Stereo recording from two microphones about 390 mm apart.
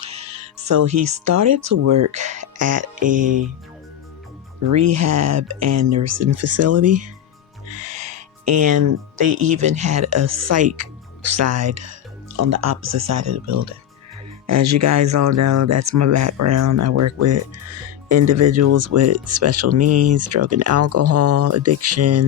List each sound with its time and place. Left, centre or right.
0.0 s music: right
0.7 s speech: right
3.0 s music: centre
4.6 s speech: right
7.8 s music: right
9.8 s speech: right